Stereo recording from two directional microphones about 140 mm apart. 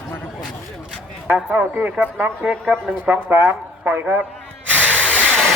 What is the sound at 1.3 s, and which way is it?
Speech, 10° right (ahead or behind).